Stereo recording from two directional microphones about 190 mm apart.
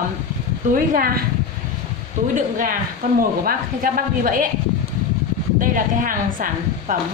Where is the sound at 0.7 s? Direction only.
50° right (ahead or behind).